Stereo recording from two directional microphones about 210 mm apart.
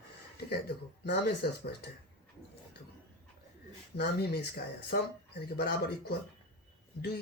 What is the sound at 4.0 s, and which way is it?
Speech, 50° left (ahead or behind).